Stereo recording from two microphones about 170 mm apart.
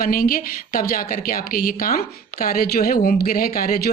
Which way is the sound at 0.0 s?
55° left (ahead or behind).